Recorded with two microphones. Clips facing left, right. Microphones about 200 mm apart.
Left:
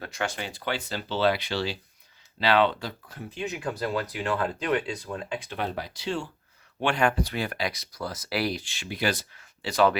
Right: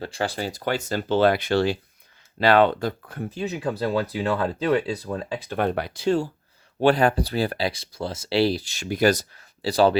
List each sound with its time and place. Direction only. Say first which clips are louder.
0.0 s speech: right 5 dB; 30° right (ahead or behind); by 3.3 s 50° right (ahead or behind)
3.3 s speech: right 4 dB; 35° right (ahead or behind); by 6.1 s 60° right (ahead or behind)
6.7 s speech: right 6 dB; 35° right (ahead or behind)